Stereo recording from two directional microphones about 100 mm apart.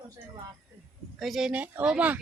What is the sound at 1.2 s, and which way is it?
Speech, 5° right (ahead or behind).